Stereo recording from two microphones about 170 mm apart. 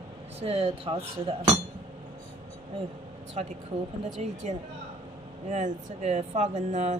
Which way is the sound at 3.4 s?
40° right (ahead or behind).